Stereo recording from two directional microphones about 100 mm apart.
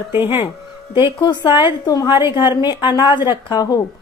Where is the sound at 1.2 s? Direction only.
50° left (ahead or behind).